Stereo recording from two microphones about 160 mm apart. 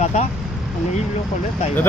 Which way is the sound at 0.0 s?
45° left (ahead or behind).